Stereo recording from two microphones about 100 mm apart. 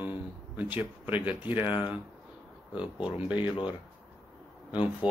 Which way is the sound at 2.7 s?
10° right (ahead or behind).